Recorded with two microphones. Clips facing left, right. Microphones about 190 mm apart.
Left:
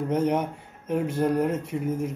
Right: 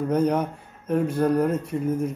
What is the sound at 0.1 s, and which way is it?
Speech, 20° left (ahead or behind).